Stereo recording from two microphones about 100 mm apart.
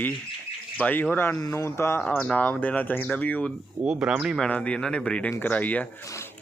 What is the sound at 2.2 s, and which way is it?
Speech, 10° left (ahead or behind).